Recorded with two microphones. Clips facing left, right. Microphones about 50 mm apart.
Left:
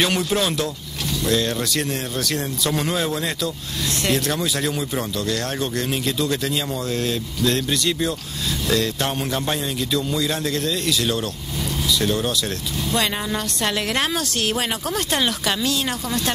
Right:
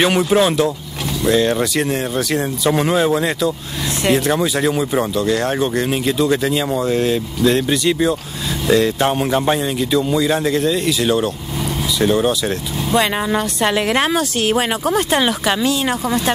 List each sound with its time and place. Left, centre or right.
0.0 s speech: centre